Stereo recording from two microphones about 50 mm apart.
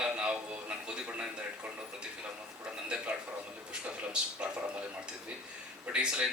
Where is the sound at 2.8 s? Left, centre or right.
Right.